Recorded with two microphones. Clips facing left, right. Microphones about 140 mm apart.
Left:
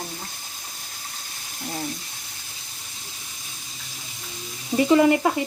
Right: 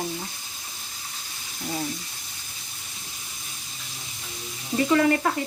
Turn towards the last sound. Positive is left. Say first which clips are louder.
# left 4 dB
turn(degrees=20)  # may be behind; listen again after turning